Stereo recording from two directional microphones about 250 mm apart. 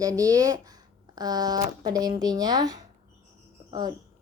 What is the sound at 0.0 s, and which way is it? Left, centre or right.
A woman's voice, centre.